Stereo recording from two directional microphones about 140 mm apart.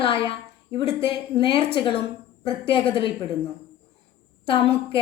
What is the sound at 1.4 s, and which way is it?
A woman's voice, 35° left (ahead or behind).